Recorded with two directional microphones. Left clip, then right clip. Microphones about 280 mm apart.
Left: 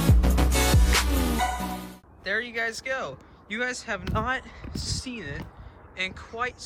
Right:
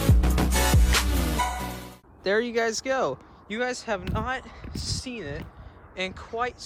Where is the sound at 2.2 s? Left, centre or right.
Centre.